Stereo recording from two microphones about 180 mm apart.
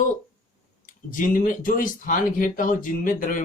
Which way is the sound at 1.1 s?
50° left (ahead or behind).